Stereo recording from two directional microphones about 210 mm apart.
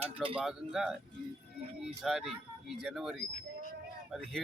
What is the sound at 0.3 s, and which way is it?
Speech, centre (ahead or behind).